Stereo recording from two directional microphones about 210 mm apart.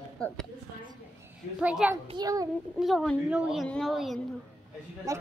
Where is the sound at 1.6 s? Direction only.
5° right (ahead or behind).